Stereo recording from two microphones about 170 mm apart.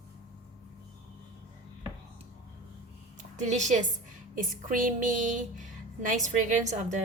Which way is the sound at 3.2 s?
45° right (ahead or behind).